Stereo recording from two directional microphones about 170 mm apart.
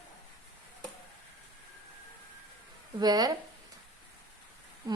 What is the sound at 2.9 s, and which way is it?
Speech, 25° right (ahead or behind).